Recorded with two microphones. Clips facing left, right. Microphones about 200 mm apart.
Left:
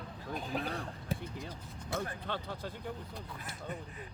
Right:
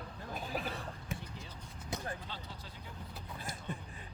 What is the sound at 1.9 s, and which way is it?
Speech, 60° left (ahead or behind).